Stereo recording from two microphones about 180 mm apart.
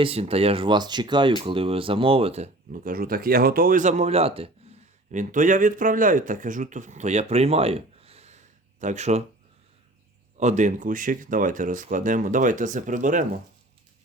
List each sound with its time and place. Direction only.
0.0 s speech: 35° right (ahead or behind)
5.1 s speech: 45° right (ahead or behind)
10.3 s speech: 40° right (ahead or behind)